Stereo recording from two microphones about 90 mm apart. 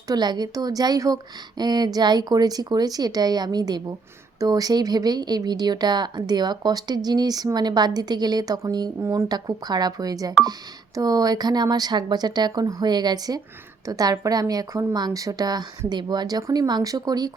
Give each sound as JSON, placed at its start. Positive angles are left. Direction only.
{"t": 0.1, "sound": "speech", "side_deg": -50}
{"t": 9.0, "sound": "speech", "side_deg": -35}
{"t": 9.3, "sound": "speech", "side_deg": -50}